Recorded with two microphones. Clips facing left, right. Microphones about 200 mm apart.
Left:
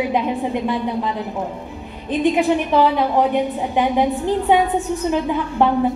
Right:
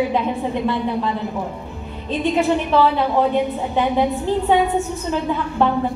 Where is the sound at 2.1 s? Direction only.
15° left (ahead or behind).